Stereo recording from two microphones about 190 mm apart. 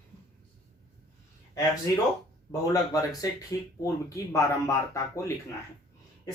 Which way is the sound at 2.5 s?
20° left (ahead or behind).